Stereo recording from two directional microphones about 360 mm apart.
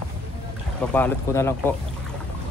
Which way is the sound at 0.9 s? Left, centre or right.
Centre.